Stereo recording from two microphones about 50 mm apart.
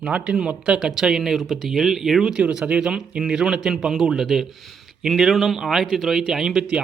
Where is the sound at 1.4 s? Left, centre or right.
Centre.